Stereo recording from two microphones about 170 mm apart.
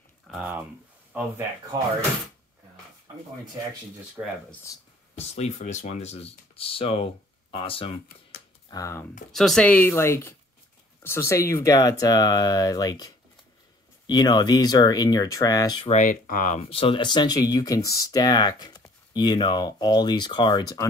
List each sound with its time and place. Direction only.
0.3 s a sound: 10° right (ahead or behind)
1.1 s speech: 10° right (ahead or behind)
4.2 s speech: 10° right (ahead or behind)
4.7 s speech: 20° left (ahead or behind)
5.1 s speech: 40° left (ahead or behind)
8.6 s speech: 20° left (ahead or behind)
9.3 s speech: centre (ahead or behind); by 15.8 s 20° left (ahead or behind)
15.9 s speech: 50° left (ahead or behind)
16.6 s speech: 35° left (ahead or behind)